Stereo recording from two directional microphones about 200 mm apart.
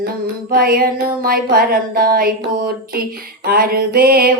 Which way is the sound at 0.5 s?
45° right (ahead or behind).